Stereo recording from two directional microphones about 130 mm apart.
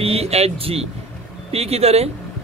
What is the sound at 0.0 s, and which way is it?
A man's voice, 50° right (ahead or behind).